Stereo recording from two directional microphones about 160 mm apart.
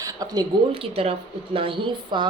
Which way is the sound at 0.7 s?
35° right (ahead or behind).